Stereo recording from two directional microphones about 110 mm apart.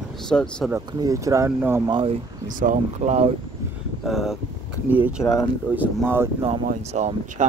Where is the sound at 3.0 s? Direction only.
90° right.